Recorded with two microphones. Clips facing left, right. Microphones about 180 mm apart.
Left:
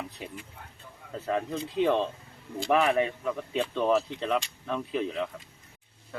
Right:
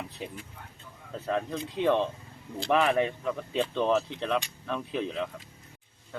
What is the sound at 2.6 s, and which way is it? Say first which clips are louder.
Speech: left 1 dB; 5° left (ahead or behind).